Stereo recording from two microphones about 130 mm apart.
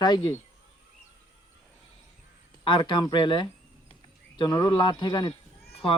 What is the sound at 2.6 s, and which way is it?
Speech, 35° left (ahead or behind).